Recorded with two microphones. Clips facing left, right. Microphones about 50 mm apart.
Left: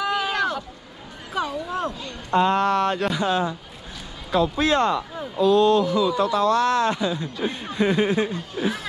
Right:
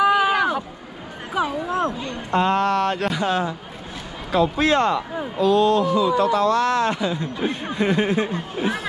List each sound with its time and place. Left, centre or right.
0.0 s a sound: centre
1.7 s speech: right
2.3 s speech: right
8.3 s speech: right